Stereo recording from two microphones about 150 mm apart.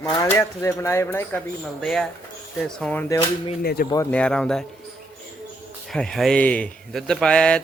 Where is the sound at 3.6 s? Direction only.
90° left.